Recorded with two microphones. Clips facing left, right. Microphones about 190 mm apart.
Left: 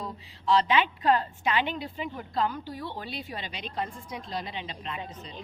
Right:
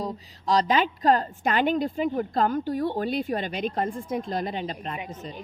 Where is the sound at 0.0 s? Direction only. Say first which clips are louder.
Right 4 dB; 40° right (ahead or behind).